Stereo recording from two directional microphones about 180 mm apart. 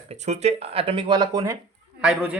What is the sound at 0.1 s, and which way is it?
Speech, 40° right (ahead or behind).